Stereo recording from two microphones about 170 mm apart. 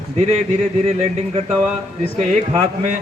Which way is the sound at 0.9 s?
40° right (ahead or behind).